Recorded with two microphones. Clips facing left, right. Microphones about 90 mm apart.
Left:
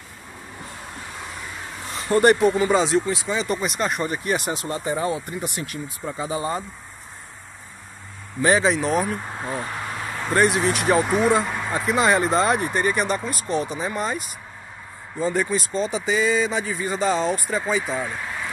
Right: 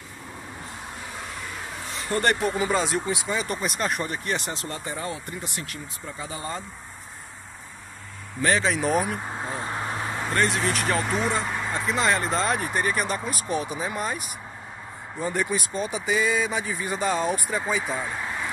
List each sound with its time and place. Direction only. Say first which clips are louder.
2.0 s speech: left 7 dB; 20° left (ahead or behind)
2.7 s speech: left 5 dB; centre (ahead or behind); by 6.6 s 20° left (ahead or behind)
8.6 s speech: left 3 dB; centre (ahead or behind)
9.3 s a sound: left 2 dB; 25° right (ahead or behind)
10.3 s speech: left 6 dB; 10° left (ahead or behind)